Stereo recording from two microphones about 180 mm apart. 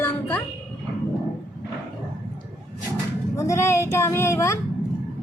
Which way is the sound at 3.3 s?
15° left (ahead or behind).